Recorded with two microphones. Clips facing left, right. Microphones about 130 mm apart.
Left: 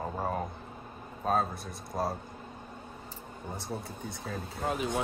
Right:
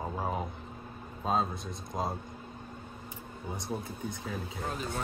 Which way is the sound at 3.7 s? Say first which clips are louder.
Right 3 dB; 15° right (ahead or behind).